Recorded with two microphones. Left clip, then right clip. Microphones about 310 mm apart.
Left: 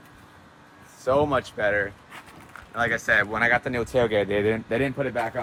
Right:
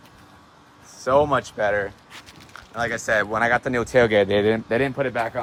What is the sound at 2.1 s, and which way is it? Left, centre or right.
Speech, centre.